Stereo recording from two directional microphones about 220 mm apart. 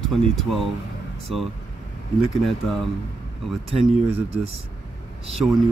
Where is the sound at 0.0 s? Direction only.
Centre (ahead or behind).